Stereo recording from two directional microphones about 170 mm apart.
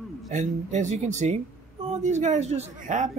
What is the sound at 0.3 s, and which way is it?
Speech, 45° right (ahead or behind).